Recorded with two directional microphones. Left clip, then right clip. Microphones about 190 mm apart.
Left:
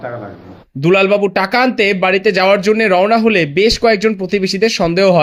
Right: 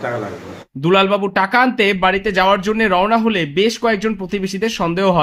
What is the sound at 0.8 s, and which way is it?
Speech, 20° left (ahead or behind).